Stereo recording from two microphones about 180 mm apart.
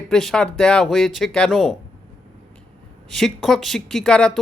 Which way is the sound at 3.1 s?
Centre (ahead or behind).